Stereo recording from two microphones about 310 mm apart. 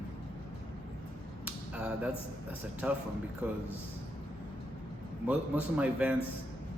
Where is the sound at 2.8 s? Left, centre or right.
Centre.